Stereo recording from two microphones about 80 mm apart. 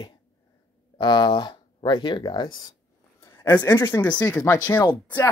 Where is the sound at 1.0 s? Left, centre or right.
Left.